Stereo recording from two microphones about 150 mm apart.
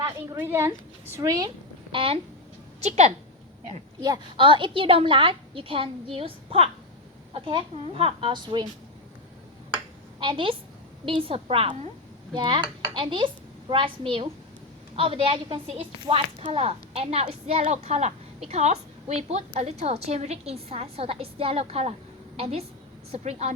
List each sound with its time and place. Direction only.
0.0 s a woman's voice: 20° right (ahead or behind)
1.5 s a sound: 35° right (ahead or behind)
2.8 s a woman's voice: 50° right (ahead or behind)
4.0 s a woman's voice: 30° right (ahead or behind)
9.7 s a sound: 35° right (ahead or behind)
11.0 s a woman's voice: 35° right (ahead or behind)